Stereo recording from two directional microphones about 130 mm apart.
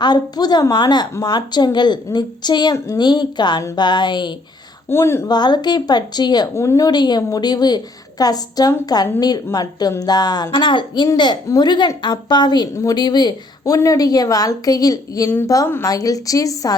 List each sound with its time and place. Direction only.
0.0 s speech: 30° left (ahead or behind)
2.7 s a woman's voice: 20° left (ahead or behind)
3.0 s speech: 35° left (ahead or behind)
4.9 s a woman's voice: 20° left (ahead or behind)
5.3 s a woman's voice: 35° left (ahead or behind)